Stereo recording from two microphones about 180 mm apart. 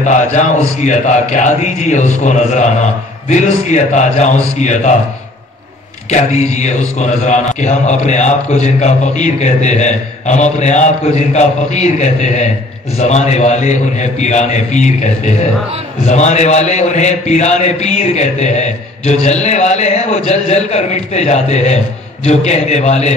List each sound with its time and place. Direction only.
0.0 s a man's voice: 40° left (ahead or behind)
6.0 s a man's voice: 40° left (ahead or behind)